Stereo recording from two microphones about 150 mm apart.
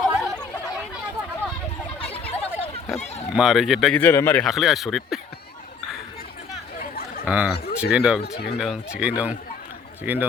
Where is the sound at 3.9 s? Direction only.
15° left (ahead or behind).